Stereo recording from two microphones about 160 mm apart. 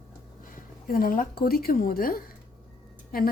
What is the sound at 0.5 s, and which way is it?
Speech, 65° left (ahead or behind).